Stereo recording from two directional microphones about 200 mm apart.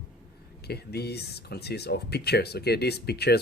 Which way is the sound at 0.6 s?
55° left (ahead or behind).